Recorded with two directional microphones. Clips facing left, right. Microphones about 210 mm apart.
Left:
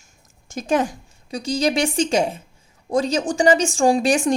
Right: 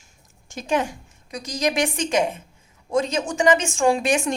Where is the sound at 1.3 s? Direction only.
30° left (ahead or behind).